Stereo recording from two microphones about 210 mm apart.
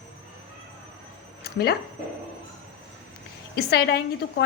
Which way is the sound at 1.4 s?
50° left (ahead or behind).